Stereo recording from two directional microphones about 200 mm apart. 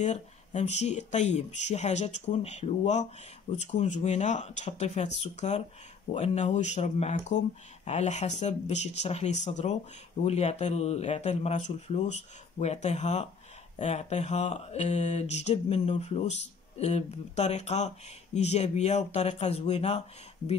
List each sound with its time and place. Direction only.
0.0 s mantra: 35° left (ahead or behind)